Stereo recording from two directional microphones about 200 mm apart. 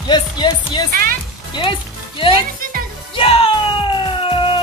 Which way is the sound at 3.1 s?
30° left (ahead or behind).